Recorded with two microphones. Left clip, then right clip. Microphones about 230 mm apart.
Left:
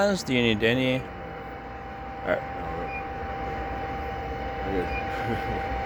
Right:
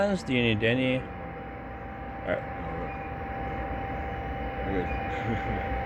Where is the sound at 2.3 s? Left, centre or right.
Left.